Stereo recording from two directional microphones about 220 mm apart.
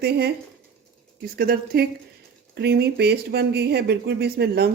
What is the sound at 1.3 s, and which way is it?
Speech, 40° right (ahead or behind).